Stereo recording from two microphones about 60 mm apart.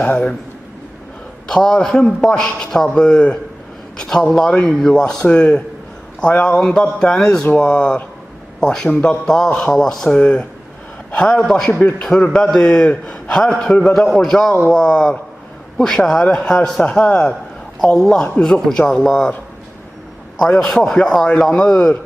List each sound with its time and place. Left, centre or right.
0.1 s a man's voice: left
1.5 s a man's voice: centre
6.6 s a man's voice: centre
20.7 s a man's voice: centre